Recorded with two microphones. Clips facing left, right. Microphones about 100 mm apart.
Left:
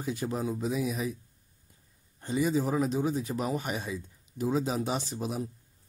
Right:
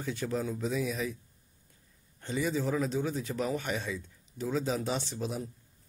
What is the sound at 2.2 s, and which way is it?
A man's voice, 15° left (ahead or behind).